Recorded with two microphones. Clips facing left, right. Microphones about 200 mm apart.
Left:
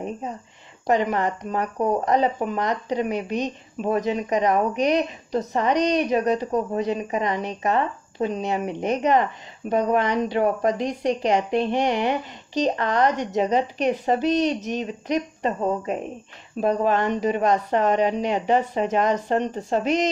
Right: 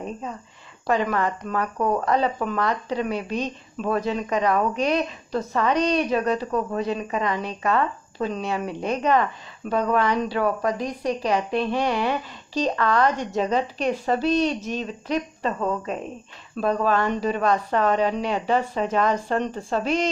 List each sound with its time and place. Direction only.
0.0 s speech: 20° left (ahead or behind)